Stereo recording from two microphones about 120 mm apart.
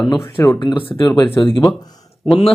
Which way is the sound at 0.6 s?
40° left (ahead or behind).